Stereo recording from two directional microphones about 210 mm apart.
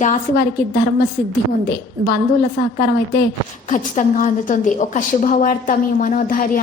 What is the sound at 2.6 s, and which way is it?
Speech, 50° left (ahead or behind).